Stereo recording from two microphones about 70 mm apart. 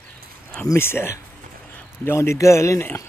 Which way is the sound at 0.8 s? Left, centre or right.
Left.